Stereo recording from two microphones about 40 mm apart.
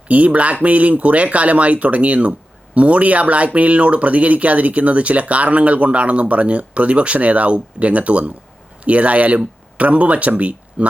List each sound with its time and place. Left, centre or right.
0.1 s speech: right